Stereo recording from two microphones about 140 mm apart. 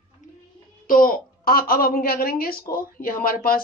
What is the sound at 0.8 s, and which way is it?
A woman's voice, 85° left.